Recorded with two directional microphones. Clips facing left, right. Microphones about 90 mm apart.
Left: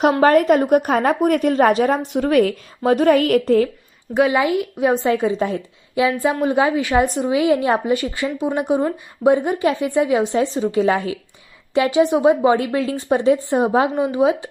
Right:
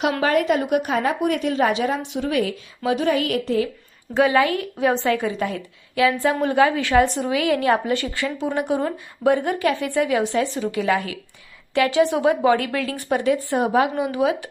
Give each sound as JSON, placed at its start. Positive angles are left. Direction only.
{"t": 0.0, "sound": "speech", "side_deg": 40}
{"t": 4.1, "sound": "a woman's voice", "side_deg": 15}